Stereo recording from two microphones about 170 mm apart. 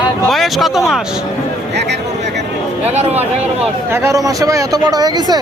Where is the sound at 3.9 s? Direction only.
15° right (ahead or behind).